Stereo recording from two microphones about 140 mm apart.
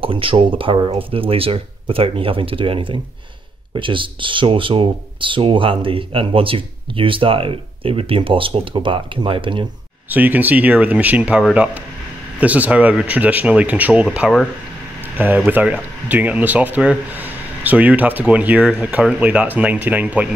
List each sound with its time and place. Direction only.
0.0 s speech: 40° right (ahead or behind)
10.0 s speech: 15° right (ahead or behind)
15.1 s speech: 10° right (ahead or behind)